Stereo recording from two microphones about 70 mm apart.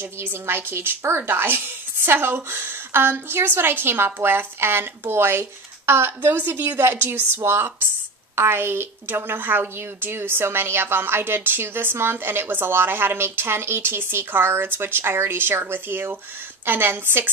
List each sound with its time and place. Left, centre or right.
0.0 s a woman's voice: right